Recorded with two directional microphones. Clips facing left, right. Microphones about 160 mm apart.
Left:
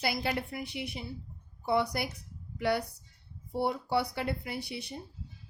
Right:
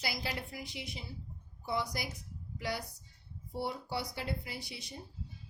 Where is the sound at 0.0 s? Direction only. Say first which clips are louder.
Left 7 dB; 60° left (ahead or behind).